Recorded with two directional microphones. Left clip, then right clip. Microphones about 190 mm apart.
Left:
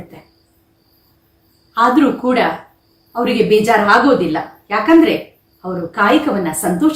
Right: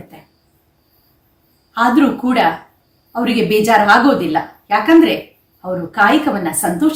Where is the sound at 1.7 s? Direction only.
15° right (ahead or behind).